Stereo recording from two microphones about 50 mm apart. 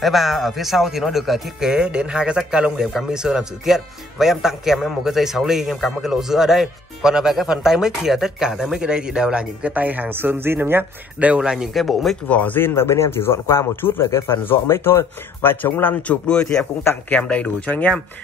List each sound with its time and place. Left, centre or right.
0.0 s speech: centre
1.7 s speech: centre; by 10.1 s right
10.1 s speech: right
11.1 s a man's voice: right
11.4 s speech: centre
11.7 s speech: centre
12.3 s speech: left
12.5 s a man's voice: left
14.1 s a man's voice: left
14.4 s speech: left
16.0 s speech: left